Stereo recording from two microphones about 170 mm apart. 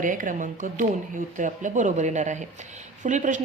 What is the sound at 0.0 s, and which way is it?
A woman's voice, 50° right (ahead or behind).